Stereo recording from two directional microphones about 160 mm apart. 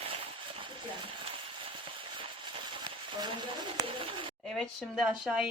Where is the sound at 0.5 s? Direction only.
35° right (ahead or behind).